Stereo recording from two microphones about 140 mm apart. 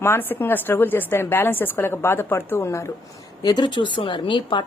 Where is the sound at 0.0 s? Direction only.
15° left (ahead or behind).